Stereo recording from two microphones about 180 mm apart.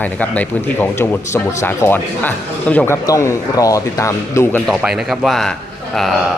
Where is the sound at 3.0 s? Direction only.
20° left (ahead or behind).